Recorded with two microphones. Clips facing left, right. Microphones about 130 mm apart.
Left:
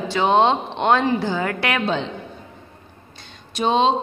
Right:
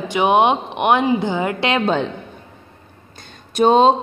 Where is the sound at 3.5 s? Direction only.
45° right (ahead or behind).